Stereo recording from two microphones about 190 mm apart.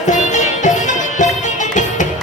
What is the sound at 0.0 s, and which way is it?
Music, 40° left (ahead or behind).